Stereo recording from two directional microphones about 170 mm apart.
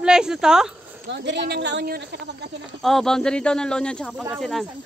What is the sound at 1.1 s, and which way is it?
A woman's voice, 90° right.